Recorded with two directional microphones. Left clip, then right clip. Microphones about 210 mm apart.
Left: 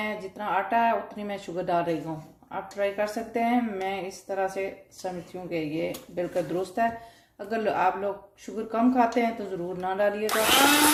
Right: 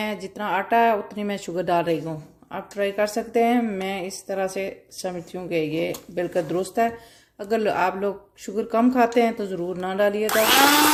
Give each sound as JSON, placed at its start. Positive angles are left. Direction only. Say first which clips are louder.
{"t": 0.0, "sound": "speech", "louder": "right 3 dB", "side_deg": -40}